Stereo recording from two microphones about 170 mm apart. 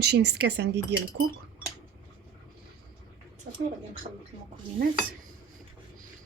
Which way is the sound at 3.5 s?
60° right (ahead or behind).